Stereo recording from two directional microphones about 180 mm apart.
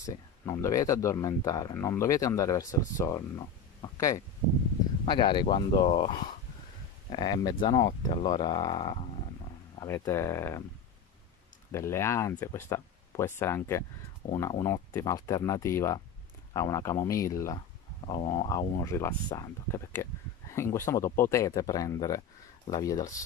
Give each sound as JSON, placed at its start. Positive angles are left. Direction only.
{"t": 0.0, "sound": "speech", "side_deg": 20}
{"t": 11.7, "sound": "speech", "side_deg": 15}
{"t": 18.2, "sound": "speech", "side_deg": 30}
{"t": 18.5, "sound": "speech", "side_deg": 20}